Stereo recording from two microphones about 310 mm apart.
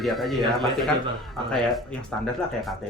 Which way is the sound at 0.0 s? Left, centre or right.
Centre.